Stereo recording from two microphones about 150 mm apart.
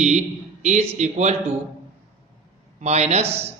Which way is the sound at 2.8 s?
45° right (ahead or behind).